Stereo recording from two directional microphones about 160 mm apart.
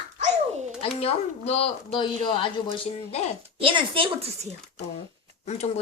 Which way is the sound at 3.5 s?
35° right (ahead or behind).